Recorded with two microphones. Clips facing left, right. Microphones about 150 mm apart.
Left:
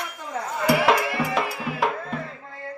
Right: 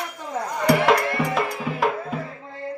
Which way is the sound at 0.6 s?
5° left (ahead or behind).